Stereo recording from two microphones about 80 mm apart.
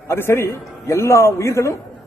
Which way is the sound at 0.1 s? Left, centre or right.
Left.